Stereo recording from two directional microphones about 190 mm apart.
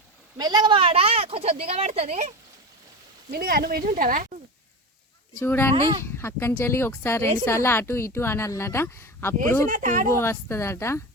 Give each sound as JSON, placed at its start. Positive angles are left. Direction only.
{"t": 0.3, "sound": "a woman's voice", "side_deg": -20}
{"t": 3.3, "sound": "speech", "side_deg": -55}
{"t": 5.4, "sound": "a woman's voice", "side_deg": 10}
{"t": 9.6, "sound": "speech", "side_deg": -45}
{"t": 10.1, "sound": "a woman's voice", "side_deg": 15}